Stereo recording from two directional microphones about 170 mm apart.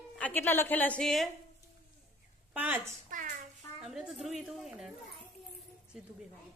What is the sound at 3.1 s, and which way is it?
Child singing, 50° right (ahead or behind).